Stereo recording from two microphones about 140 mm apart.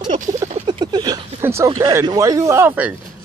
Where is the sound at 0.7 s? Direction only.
30° right (ahead or behind).